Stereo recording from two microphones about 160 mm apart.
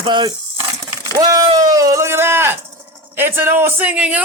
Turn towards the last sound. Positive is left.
turn(degrees=-10)  # may be behind; listen again after turning